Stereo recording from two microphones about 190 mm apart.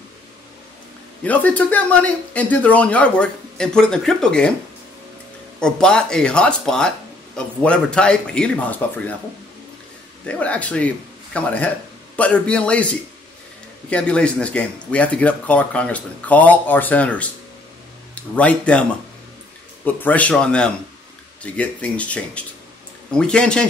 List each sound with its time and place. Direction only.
1.2 s speech: 10° left (ahead or behind)
5.6 s speech: 5° left (ahead or behind)
10.2 s speech: 5° left (ahead or behind)
18.3 s speech: 5° left (ahead or behind)